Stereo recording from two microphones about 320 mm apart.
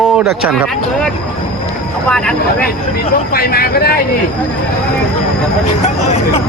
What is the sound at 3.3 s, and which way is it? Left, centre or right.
Speech, left.